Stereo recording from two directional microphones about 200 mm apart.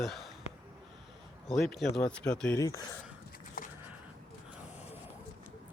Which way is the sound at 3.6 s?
45° left (ahead or behind).